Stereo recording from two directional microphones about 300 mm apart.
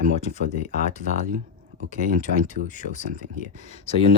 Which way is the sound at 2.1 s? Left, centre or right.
Right.